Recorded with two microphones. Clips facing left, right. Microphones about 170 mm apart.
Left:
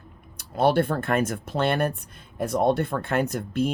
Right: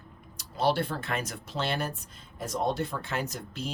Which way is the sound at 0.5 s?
55° left (ahead or behind).